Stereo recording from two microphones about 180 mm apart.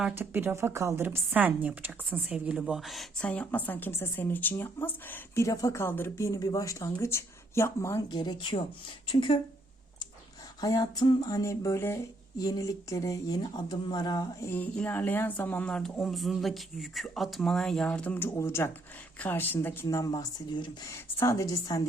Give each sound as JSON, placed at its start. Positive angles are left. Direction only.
{"t": 0.0, "sound": "a woman's voice", "side_deg": -10}
{"t": 10.6, "sound": "speech", "side_deg": 20}
{"t": 14.5, "sound": "a woman's voice", "side_deg": 10}